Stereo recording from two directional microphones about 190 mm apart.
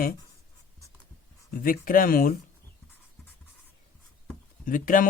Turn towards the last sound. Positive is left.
turn(degrees=45)  # may be behind; listen again after turning